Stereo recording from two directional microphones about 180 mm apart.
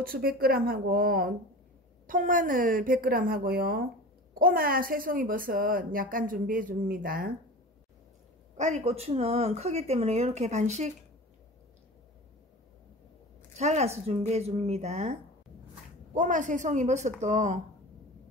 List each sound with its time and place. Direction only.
0.1 s speech: 55° right (ahead or behind)
8.5 s speech: 40° right (ahead or behind)
13.6 s speech: 40° right (ahead or behind)
16.2 s speech: 45° right (ahead or behind)